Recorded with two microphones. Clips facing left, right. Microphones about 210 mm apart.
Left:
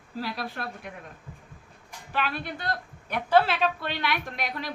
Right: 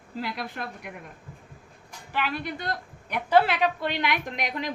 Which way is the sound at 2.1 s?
15° right (ahead or behind).